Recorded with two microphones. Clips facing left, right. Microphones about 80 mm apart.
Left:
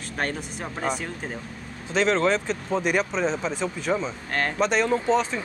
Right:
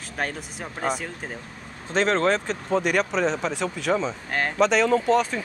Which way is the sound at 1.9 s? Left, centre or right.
Right.